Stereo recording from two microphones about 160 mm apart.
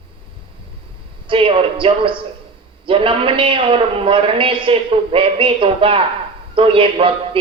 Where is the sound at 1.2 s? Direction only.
35° right (ahead or behind).